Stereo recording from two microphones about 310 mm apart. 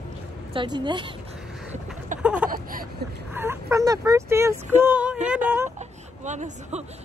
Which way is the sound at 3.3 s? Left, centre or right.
Centre.